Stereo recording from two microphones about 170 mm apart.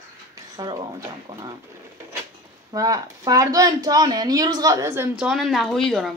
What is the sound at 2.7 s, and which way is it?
A woman's voice, 20° right (ahead or behind).